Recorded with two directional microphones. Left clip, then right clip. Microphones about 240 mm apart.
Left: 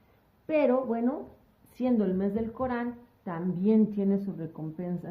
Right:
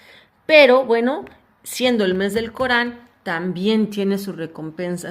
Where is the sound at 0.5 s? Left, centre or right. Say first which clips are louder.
Right 14 dB; right.